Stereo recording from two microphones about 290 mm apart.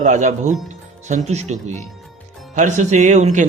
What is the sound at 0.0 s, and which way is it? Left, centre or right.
A man's voice, right.